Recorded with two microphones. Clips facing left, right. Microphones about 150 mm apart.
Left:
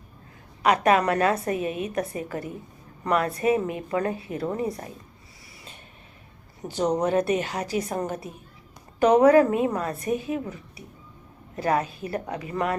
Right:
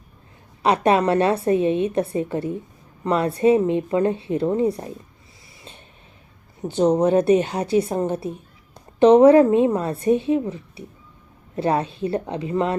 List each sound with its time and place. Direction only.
0.6 s a woman's voice: 30° right (ahead or behind)
6.6 s a woman's voice: 25° right (ahead or behind)